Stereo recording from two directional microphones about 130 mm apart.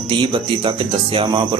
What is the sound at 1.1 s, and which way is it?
Speech, 40° right (ahead or behind).